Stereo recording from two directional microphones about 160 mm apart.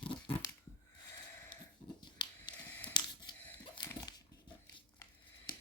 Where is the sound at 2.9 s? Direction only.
25° left (ahead or behind).